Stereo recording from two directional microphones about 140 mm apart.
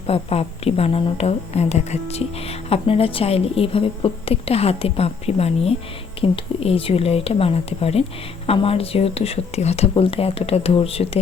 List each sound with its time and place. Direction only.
0.1 s a woman's voice: 45° left (ahead or behind)